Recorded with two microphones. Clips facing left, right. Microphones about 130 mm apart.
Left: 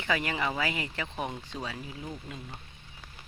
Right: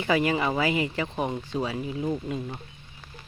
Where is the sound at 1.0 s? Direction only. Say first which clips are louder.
Right 6 dB; 40° right (ahead or behind).